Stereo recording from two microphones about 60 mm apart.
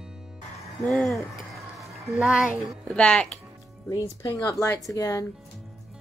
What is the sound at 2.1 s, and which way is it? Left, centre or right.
Speech, centre.